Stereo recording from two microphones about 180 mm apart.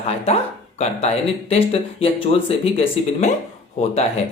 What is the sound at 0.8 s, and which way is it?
Speech, 35° left (ahead or behind).